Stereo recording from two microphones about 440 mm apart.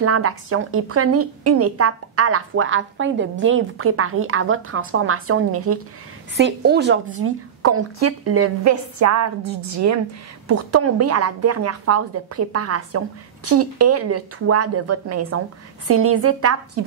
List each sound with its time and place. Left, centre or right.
0.0 s a woman's voice: right